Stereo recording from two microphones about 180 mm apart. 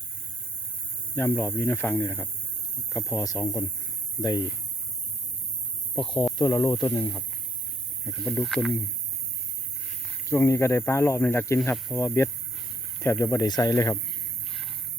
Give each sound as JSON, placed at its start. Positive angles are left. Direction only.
{"t": 1.1, "sound": "speech", "side_deg": 15}
{"t": 6.3, "sound": "speech", "side_deg": 20}
{"t": 10.2, "sound": "speech", "side_deg": 15}